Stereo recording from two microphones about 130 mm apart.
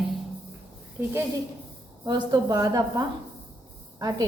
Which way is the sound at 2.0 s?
30° right (ahead or behind).